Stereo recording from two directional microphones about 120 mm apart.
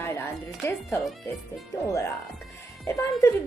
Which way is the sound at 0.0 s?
20° left (ahead or behind).